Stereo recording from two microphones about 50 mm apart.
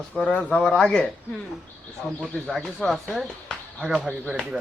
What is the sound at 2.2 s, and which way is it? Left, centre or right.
Speech, centre.